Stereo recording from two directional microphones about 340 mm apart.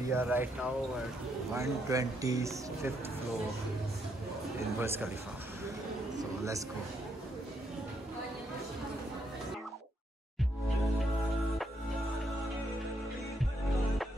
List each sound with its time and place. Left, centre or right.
0.1 s speech: centre
4.7 s speech: centre
6.1 s a sound: centre